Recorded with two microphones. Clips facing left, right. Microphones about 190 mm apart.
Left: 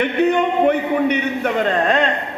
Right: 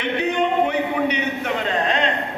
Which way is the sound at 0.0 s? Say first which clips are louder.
Left 5 dB; 55° left (ahead or behind).